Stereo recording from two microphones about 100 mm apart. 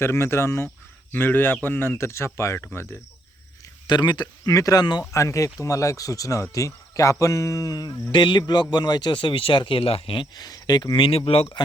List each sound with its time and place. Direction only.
0.0 s speech: 25° left (ahead or behind)
3.8 s speech: 45° left (ahead or behind)
5.1 s speech: 30° left (ahead or behind)
8.1 s speech: 50° left (ahead or behind); by 10.2 s 70° left (ahead or behind)
10.3 s speech: 45° left (ahead or behind)
11.3 s speech: 75° left (ahead or behind)